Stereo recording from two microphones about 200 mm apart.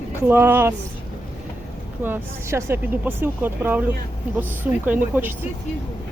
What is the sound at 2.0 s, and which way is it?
Speech, 10° right (ahead or behind).